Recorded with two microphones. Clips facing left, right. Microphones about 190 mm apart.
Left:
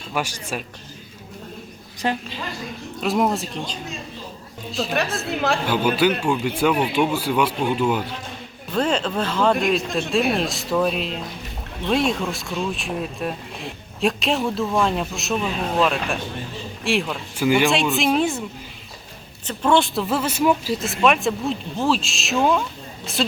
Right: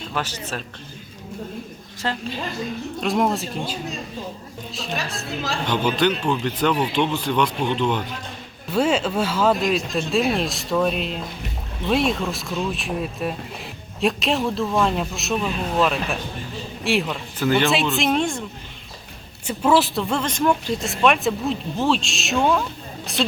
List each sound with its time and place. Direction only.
0.1 s speech: 10° left (ahead or behind)
2.0 s speech: 15° left (ahead or behind)
3.0 s speech: centre (ahead or behind)
5.6 s speech: 5° left (ahead or behind)
8.7 s speech: 5° right (ahead or behind)
17.3 s speech: 10° left (ahead or behind)
17.7 s speech: centre (ahead or behind)
19.5 s speech: 5° right (ahead or behind)